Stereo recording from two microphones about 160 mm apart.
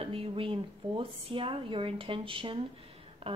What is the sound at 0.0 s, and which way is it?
A woman's voice, 35° right (ahead or behind).